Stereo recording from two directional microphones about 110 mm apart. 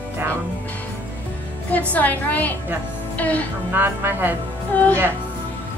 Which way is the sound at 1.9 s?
15° left (ahead or behind).